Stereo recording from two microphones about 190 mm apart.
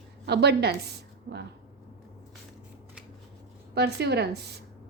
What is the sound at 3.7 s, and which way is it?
Speech, 60° right (ahead or behind).